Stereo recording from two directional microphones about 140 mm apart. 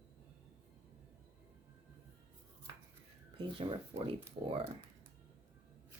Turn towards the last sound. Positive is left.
turn(degrees=-40)  # may be behind; listen again after turning